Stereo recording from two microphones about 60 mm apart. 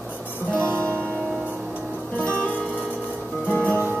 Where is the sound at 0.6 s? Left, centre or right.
Right.